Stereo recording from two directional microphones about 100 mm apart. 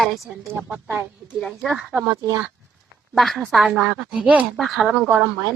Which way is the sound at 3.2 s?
Centre (ahead or behind).